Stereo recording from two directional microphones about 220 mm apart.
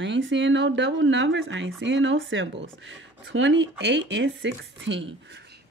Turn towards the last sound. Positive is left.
turn(degrees=-55)  # may be behind; listen again after turning